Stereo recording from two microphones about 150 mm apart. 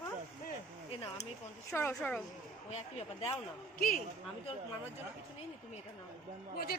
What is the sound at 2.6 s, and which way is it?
Speech, 45° left (ahead or behind).